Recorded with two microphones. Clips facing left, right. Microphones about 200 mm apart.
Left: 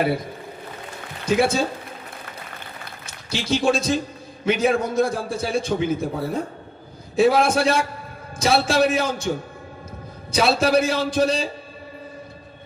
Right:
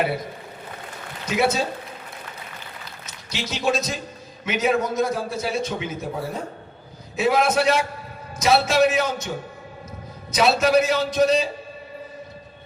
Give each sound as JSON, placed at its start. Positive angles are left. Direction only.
{"t": 1.2, "sound": "speech", "side_deg": 30}
{"t": 3.3, "sound": "a man's voice", "side_deg": 30}
{"t": 7.2, "sound": "a man's voice", "side_deg": 30}
{"t": 10.3, "sound": "a man's voice", "side_deg": 30}